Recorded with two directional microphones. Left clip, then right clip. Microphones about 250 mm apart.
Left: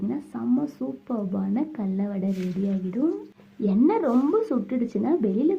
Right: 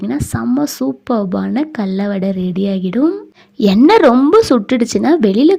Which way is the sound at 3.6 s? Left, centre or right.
Right.